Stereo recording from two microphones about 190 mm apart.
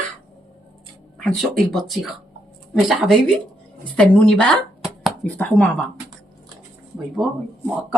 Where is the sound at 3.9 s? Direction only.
5° left (ahead or behind).